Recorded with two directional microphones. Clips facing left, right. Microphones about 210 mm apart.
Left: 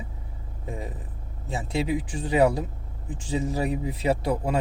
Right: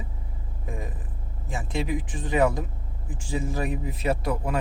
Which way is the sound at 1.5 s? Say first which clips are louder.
Left 2 dB; 25° left (ahead or behind).